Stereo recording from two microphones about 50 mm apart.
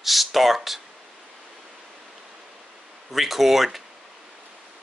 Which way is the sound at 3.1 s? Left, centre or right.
Centre.